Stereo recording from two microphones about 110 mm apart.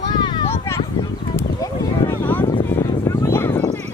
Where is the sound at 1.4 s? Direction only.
25° left (ahead or behind).